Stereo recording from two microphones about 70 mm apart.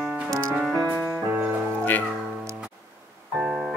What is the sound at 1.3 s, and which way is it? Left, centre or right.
Music, right.